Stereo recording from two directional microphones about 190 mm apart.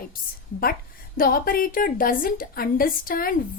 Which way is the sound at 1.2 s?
50° left (ahead or behind).